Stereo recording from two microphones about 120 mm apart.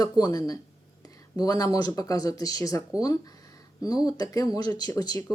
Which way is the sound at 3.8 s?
30° left (ahead or behind).